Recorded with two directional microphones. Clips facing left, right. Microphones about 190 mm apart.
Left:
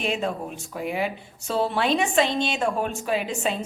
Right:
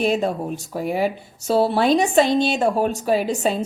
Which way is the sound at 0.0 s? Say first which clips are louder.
Right 6 dB; 40° right (ahead or behind).